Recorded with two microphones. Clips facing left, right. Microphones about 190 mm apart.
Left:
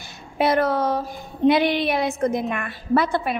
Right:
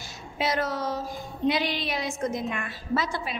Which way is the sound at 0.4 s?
60° left (ahead or behind).